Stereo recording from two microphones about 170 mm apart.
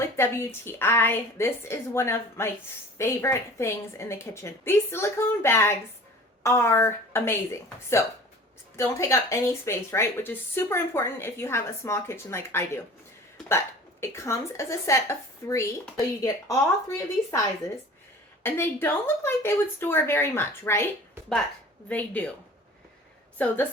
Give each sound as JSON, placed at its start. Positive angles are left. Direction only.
{"t": 0.0, "sound": "a woman's voice", "side_deg": 15}
{"t": 8.7, "sound": "a woman's voice", "side_deg": 15}
{"t": 14.0, "sound": "a woman's voice", "side_deg": 15}
{"t": 18.4, "sound": "a woman's voice", "side_deg": 15}
{"t": 21.8, "sound": "a woman's voice", "side_deg": 10}
{"t": 23.4, "sound": "a woman's voice", "side_deg": 10}